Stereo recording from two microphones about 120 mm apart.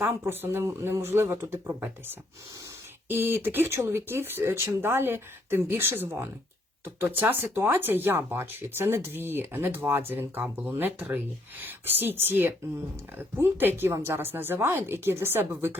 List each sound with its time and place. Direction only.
0.0 s speech: 20° right (ahead or behind)
3.1 s speech: 20° right (ahead or behind)